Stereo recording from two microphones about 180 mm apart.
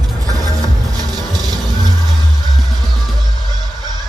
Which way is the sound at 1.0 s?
20° right (ahead or behind).